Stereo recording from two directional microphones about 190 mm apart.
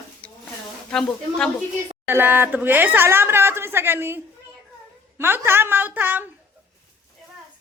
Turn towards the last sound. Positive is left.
turn(degrees=-10)  # may be behind; listen again after turning